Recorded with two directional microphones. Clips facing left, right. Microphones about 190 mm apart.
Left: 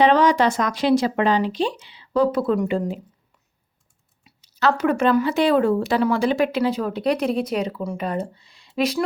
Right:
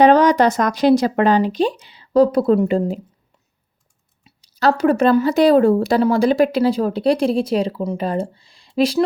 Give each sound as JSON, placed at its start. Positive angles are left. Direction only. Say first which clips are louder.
{"t": 0.0, "sound": "speech", "louder": "right 4 dB", "side_deg": -40}
{"t": 4.2, "sound": "speech", "louder": "right 3 dB", "side_deg": -30}